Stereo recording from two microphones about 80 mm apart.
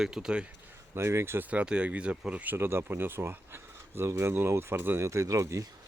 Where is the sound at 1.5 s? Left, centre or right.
Centre; by 5.6 s right.